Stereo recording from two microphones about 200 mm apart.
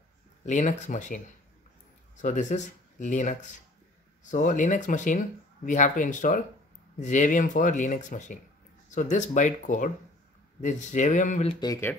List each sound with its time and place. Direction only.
0.5 s speech: 35° left (ahead or behind)
2.2 s speech: 35° left (ahead or behind)
11.6 s speech: 15° left (ahead or behind)